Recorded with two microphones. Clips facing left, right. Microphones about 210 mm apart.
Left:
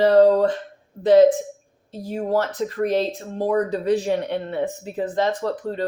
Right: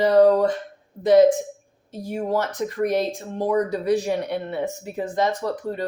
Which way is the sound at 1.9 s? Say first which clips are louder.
Left 2 dB; 15° right (ahead or behind).